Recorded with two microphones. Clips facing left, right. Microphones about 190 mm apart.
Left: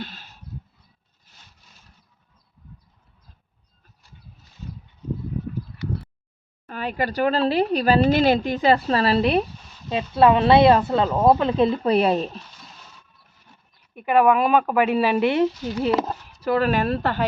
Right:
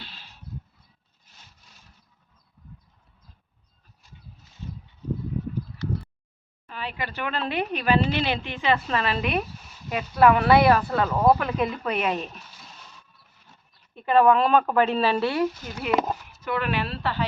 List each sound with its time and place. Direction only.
0.0 s a sound: 45° left (ahead or behind)
6.7 s speech: 45° left (ahead or behind)
13.9 s a woman's voice: 10° left (ahead or behind); by 17.2 s 50° left (ahead or behind)